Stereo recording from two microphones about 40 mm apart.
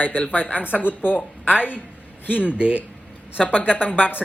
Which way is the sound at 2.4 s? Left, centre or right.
Right.